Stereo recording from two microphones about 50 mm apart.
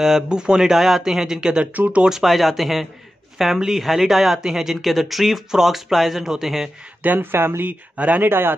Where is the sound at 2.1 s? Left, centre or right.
Centre.